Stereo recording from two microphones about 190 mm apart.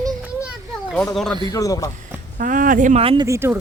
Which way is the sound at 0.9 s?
5° left (ahead or behind).